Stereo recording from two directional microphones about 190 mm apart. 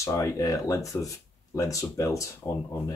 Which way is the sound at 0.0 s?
15° left (ahead or behind).